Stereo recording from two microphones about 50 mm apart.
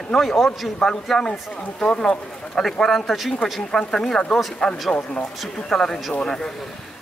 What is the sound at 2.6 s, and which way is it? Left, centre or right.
Speech, centre.